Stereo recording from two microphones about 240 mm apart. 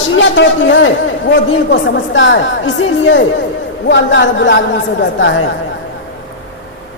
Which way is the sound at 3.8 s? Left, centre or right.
Left.